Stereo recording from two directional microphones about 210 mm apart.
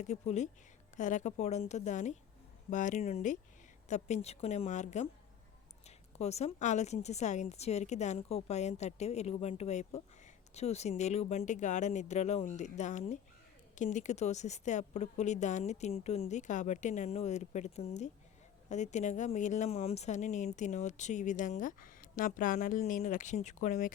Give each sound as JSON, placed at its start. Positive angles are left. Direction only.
{"t": 0.0, "sound": "speech", "side_deg": 35}